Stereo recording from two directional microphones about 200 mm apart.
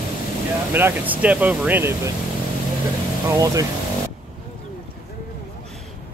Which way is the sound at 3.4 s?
15° right (ahead or behind).